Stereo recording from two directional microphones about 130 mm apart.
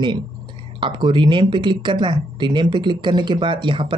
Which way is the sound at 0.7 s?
40° right (ahead or behind).